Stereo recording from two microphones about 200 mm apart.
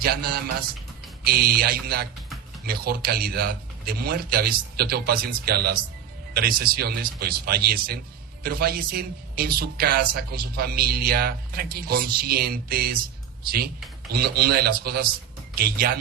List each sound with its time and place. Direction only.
0.0 s speech: 50° right (ahead or behind)
14.1 s speech: 50° right (ahead or behind)